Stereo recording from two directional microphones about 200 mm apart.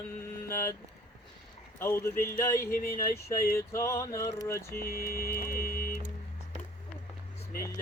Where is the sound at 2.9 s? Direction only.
15° left (ahead or behind).